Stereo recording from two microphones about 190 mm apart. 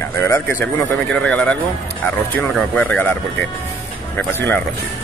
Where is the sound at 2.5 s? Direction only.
5° left (ahead or behind).